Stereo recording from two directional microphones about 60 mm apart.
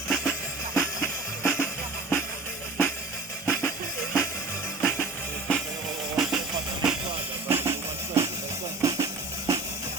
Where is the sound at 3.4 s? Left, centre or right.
Left.